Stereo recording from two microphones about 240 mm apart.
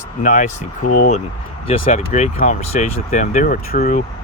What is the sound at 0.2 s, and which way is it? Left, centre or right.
Speech, left.